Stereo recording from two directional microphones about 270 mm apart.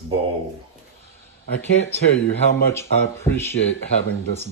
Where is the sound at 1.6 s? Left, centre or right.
Left.